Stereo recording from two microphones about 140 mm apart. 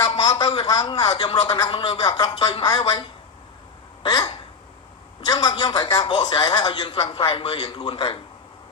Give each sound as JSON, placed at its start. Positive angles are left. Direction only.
{"t": 0.2, "sound": "a man's voice", "side_deg": 25}
{"t": 4.0, "sound": "a man's voice", "side_deg": 30}